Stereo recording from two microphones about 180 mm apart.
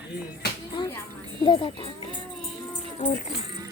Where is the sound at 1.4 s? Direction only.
30° left (ahead or behind).